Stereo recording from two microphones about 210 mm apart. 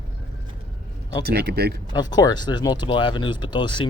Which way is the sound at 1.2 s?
50° right (ahead or behind).